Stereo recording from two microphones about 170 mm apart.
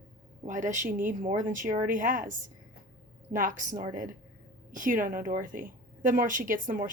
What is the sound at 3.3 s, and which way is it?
Speech, 50° right (ahead or behind).